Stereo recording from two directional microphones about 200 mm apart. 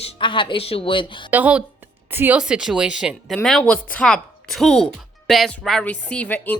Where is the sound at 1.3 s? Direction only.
10° right (ahead or behind).